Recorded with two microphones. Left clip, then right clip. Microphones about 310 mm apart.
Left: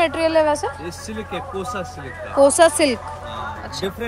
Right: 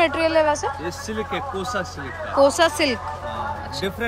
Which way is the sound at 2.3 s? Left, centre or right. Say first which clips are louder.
Left 3 dB; centre.